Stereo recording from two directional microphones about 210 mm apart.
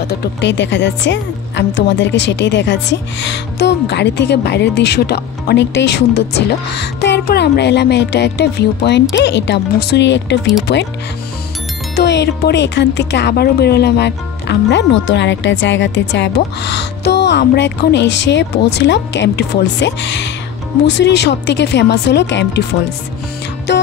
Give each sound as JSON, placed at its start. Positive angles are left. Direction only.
{"t": 0.2, "sound": "speech", "side_deg": 55}
{"t": 11.9, "sound": "speech", "side_deg": 55}